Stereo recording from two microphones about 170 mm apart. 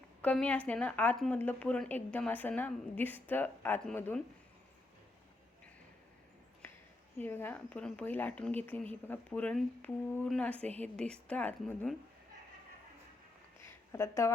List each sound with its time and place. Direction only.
0.2 s a woman's voice: 10° left (ahead or behind)
7.2 s a woman's voice: 10° left (ahead or behind)
13.7 s speech: 15° left (ahead or behind)